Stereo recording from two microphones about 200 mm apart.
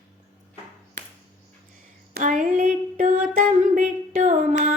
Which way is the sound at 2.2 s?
40° right (ahead or behind).